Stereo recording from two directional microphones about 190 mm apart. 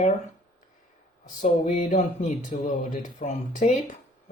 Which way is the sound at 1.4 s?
40° left (ahead or behind).